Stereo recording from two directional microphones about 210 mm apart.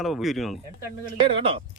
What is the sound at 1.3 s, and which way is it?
Speech, 25° right (ahead or behind).